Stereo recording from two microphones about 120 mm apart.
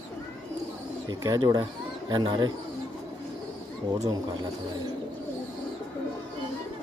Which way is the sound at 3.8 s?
40° right (ahead or behind).